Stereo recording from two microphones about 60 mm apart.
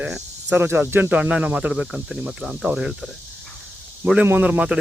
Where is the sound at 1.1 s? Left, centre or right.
Right.